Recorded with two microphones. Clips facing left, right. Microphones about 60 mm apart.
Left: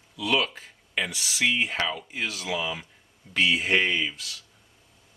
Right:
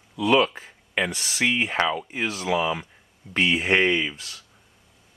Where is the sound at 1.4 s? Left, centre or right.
Right.